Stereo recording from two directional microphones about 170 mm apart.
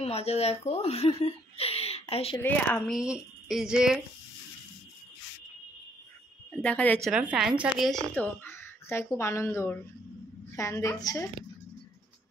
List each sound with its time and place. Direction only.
0.0 s speech: 35° left (ahead or behind)
2.4 s a woman's voice: 10° left (ahead or behind)
3.0 s speech: 5° right (ahead or behind)
6.5 s a woman's voice: 5° left (ahead or behind)
7.1 s speech: 5° right (ahead or behind)
8.1 s a woman's voice: 10° left (ahead or behind)